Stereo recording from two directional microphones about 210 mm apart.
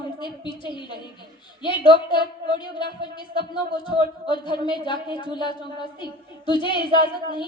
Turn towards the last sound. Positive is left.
turn(degrees=25)  # may be behind; listen again after turning